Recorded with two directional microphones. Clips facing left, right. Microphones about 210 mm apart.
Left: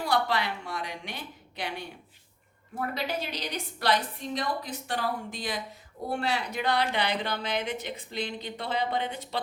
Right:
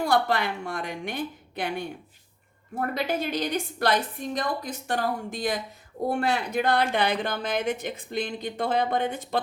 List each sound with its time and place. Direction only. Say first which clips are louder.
0.0 s a woman's voice: right 4 dB; 50° right (ahead or behind)